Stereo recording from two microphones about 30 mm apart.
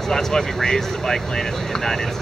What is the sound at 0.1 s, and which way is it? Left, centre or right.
Speech, centre.